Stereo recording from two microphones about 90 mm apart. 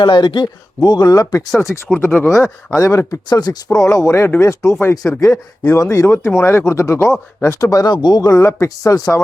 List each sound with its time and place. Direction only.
0.0 s speech: 60° left (ahead or behind); by 3.2 s 35° left (ahead or behind)
3.2 s speech: 45° left (ahead or behind)
8.4 s speech: 30° left (ahead or behind)